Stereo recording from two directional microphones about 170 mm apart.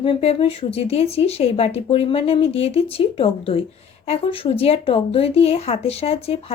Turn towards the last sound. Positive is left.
turn(degrees=35)  # may be behind; listen again after turning